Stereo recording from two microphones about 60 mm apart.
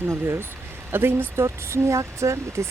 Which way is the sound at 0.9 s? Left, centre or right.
Right.